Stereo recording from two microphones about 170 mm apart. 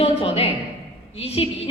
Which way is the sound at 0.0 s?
35° left (ahead or behind).